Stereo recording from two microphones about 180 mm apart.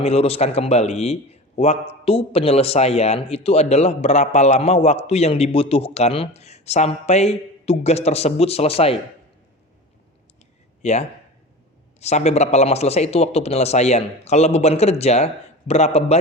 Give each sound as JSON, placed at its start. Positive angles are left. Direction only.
{"t": 0.0, "sound": "a man's voice", "side_deg": 35}
{"t": 10.8, "sound": "a man's voice", "side_deg": 40}